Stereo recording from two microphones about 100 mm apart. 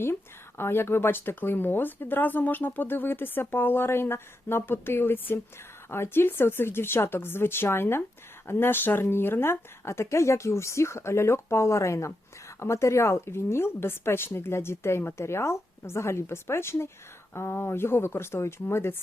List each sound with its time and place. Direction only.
0.0 s a woman's voice: 25° left (ahead or behind)